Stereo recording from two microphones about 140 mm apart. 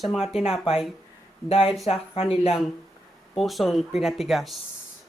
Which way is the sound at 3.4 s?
Centre (ahead or behind).